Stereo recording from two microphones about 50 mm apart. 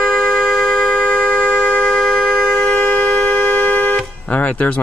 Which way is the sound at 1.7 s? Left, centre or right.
Centre.